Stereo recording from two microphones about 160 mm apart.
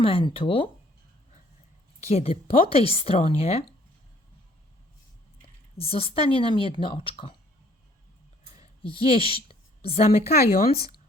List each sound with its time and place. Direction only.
0.0 s speech: 35° left (ahead or behind)
2.0 s speech: 40° left (ahead or behind)
5.7 s speech: 35° left (ahead or behind)
8.8 s a woman's voice: 35° left (ahead or behind)
10.1 s speech: 70° left (ahead or behind)